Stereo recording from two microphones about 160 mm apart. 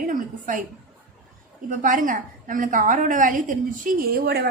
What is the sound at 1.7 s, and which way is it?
A woman's voice, 55° right (ahead or behind).